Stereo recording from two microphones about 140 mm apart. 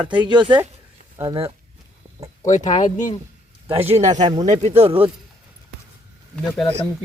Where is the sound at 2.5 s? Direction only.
60° left (ahead or behind).